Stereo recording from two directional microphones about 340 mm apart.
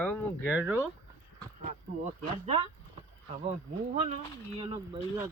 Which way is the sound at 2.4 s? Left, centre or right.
Centre.